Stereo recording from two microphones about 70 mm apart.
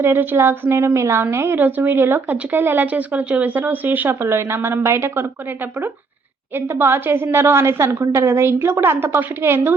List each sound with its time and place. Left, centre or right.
0.0 s a woman's voice: right
1.5 s speech: right
6.7 s a woman's voice: right